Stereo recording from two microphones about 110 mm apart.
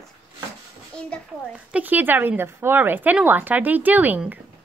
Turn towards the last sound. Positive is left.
turn(degrees=-15)  # may be behind; listen again after turning